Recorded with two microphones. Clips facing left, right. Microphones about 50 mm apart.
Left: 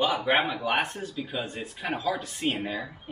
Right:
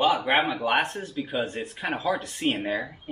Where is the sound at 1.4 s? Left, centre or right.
Right.